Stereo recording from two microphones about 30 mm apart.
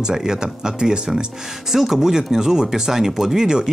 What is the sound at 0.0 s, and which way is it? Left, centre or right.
Speech, right.